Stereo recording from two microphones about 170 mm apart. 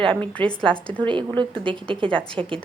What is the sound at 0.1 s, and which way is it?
Speech, 5° left (ahead or behind).